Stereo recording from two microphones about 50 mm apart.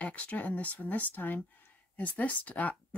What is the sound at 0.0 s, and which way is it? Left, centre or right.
Speech, left.